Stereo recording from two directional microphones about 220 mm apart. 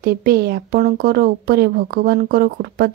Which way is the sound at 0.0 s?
45° right (ahead or behind).